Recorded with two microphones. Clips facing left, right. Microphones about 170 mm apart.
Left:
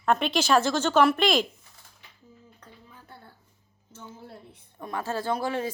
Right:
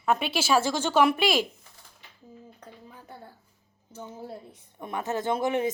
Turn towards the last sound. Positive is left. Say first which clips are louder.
# right 2 dB
turn(degrees=-20)  # may be behind; listen again after turning